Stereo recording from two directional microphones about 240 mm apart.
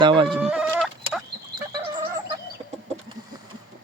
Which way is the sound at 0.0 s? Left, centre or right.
Right.